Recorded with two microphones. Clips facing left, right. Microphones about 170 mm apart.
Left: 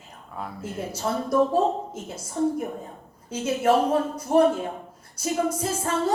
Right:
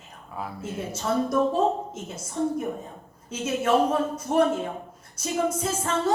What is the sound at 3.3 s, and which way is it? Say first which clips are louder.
Speech: left 2 dB; 30° left (ahead or behind).